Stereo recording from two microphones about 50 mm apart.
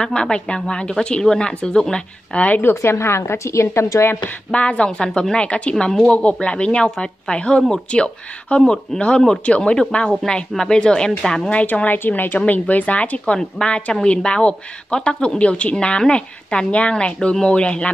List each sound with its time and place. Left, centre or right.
0.0 s a woman's voice: centre
2.7 s a woman's voice: left
4.5 s speech: left
5.9 s a woman's voice: centre
11.5 s a woman's voice: left
13.2 s speech: centre